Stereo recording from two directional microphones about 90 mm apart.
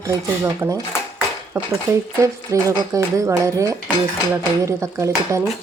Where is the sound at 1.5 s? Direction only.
40° right (ahead or behind).